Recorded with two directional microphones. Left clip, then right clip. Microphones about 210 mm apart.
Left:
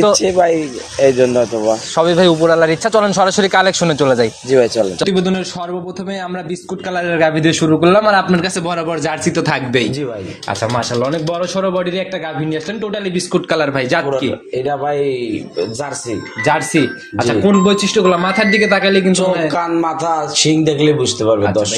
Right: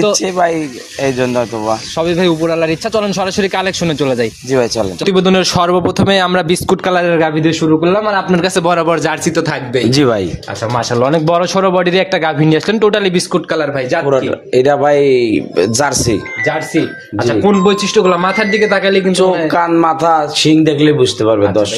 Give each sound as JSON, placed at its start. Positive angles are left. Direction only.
{"t": 0.2, "sound": "a man's voice", "side_deg": -50}
{"t": 2.0, "sound": "a man's voice", "side_deg": -5}
{"t": 4.5, "sound": "a man's voice", "side_deg": -50}
{"t": 5.0, "sound": "speech", "side_deg": -25}
{"t": 5.3, "sound": "a man's voice", "side_deg": -45}
{"t": 7.0, "sound": "speech", "side_deg": -30}
{"t": 7.2, "sound": "a man's voice", "side_deg": -10}
{"t": 8.4, "sound": "speech", "side_deg": -25}
{"t": 9.4, "sound": "a man's voice", "side_deg": 5}
{"t": 10.7, "sound": "a man's voice", "side_deg": -25}
{"t": 13.5, "sound": "speech", "side_deg": 5}
{"t": 14.1, "sound": "speech", "side_deg": -55}
{"t": 17.4, "sound": "speech", "side_deg": -20}
{"t": 19.4, "sound": "a man's voice", "side_deg": -45}